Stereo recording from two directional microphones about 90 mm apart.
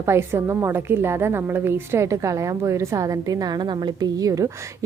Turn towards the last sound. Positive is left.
turn(degrees=-40)  # may be behind; listen again after turning